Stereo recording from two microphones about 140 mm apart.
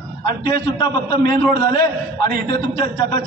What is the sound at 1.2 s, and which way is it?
Speech, 90° right.